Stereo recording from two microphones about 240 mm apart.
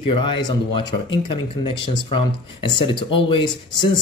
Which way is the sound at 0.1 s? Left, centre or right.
Left.